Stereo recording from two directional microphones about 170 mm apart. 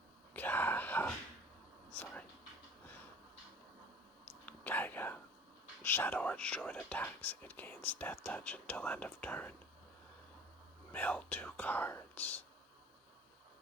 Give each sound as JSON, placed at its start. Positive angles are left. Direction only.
{"t": 0.3, "sound": "whispering", "side_deg": 10}
{"t": 1.9, "sound": "a sound", "side_deg": 10}
{"t": 4.3, "sound": "whispering", "side_deg": 10}
{"t": 5.8, "sound": "speech", "side_deg": 10}
{"t": 10.9, "sound": "speech", "side_deg": 10}